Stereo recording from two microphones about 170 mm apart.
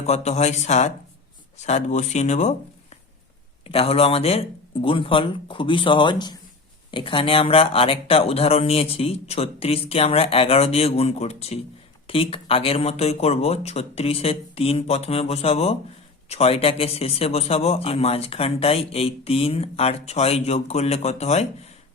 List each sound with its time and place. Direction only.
0.0 s speech: 40° left (ahead or behind)